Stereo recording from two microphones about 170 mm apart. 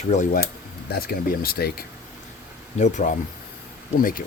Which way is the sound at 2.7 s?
45° left (ahead or behind).